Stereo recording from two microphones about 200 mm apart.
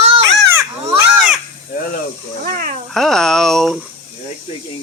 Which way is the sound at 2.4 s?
45° right (ahead or behind).